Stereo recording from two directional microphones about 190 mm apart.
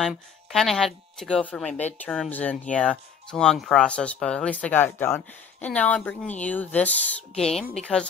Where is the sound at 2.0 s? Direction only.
5° left (ahead or behind).